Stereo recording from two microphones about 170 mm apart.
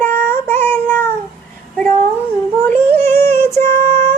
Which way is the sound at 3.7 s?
15° left (ahead or behind).